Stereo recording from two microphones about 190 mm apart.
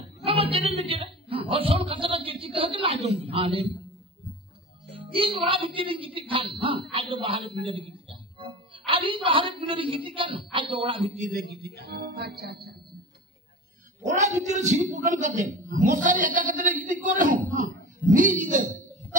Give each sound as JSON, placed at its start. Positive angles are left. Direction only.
{"t": 0.0, "sound": "a woman's voice", "side_deg": -30}
{"t": 4.9, "sound": "a woman's voice", "side_deg": -30}
{"t": 11.1, "sound": "speech", "side_deg": -50}
{"t": 14.0, "sound": "a man's voice", "side_deg": -40}